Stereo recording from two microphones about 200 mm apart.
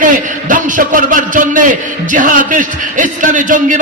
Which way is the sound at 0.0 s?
40° right (ahead or behind).